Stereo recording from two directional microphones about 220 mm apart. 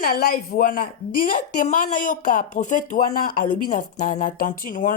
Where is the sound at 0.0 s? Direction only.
40° left (ahead or behind).